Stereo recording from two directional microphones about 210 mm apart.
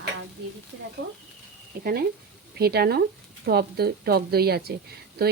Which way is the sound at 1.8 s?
45° right (ahead or behind).